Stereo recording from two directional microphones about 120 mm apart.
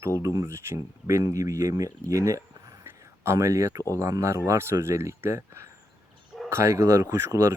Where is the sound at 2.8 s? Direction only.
20° right (ahead or behind).